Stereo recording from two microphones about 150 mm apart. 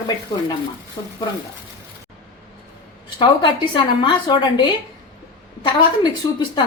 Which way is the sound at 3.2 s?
30° left (ahead or behind).